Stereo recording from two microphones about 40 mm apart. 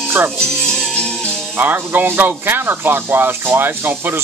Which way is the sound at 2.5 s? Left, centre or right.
Right.